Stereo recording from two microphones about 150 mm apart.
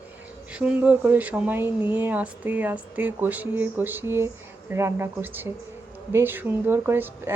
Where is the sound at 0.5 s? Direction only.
10° right (ahead or behind).